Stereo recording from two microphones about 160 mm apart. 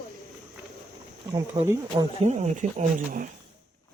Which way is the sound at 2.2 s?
45° right (ahead or behind).